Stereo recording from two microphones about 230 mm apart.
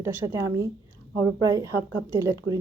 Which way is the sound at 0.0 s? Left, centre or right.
Centre.